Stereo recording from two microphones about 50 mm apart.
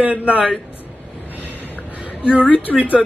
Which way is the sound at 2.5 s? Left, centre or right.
Left.